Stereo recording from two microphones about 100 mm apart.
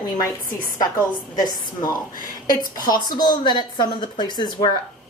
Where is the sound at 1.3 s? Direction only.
40° left (ahead or behind).